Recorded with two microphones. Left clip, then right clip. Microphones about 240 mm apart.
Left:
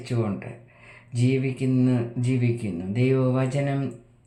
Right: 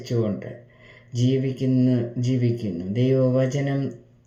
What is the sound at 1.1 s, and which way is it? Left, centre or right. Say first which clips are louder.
Speech: right 1 dB; centre.